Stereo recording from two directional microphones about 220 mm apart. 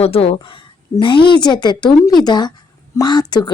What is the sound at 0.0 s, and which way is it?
A woman's voice, 25° left (ahead or behind).